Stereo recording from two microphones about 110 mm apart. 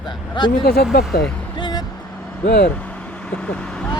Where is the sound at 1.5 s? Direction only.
45° left (ahead or behind).